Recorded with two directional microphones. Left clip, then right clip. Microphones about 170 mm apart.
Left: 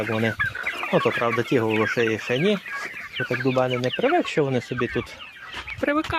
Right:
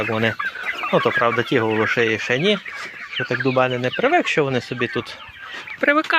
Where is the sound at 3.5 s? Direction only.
5° right (ahead or behind).